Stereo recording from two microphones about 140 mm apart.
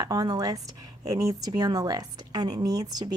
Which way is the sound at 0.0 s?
25° right (ahead or behind).